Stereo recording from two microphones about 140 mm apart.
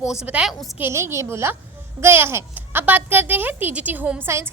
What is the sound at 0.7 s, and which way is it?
A woman's voice, 20° right (ahead or behind).